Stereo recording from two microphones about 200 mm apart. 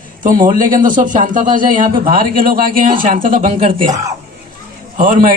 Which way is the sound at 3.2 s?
30° right (ahead or behind).